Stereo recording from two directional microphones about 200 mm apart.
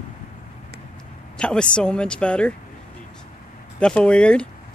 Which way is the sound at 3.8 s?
5° left (ahead or behind).